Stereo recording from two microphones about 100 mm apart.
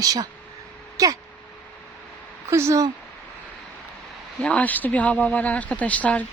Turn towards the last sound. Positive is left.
turn(degrees=15)  # may be behind; listen again after turning